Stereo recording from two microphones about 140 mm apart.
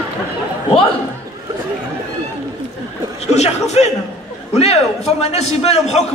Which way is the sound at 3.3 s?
50° left (ahead or behind).